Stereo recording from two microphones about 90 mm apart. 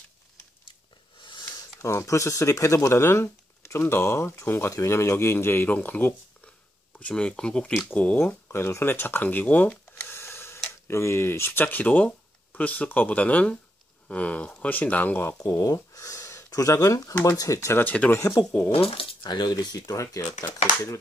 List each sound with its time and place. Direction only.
1.2 s a sound: 60° left (ahead or behind)
1.8 s speech: 35° left (ahead or behind); by 8.4 s 15° left (ahead or behind)
8.5 s a sound: 25° left (ahead or behind)
10.9 s speech: 30° left (ahead or behind)
15.7 s speech: 40° left (ahead or behind)
17.8 s speech: 15° left (ahead or behind)
18.1 s speech: 35° left (ahead or behind)
18.7 s speech: 85° left; by 21.0 s 40° left (ahead or behind)